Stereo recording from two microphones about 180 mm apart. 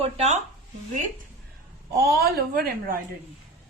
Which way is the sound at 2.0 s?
60° right (ahead or behind).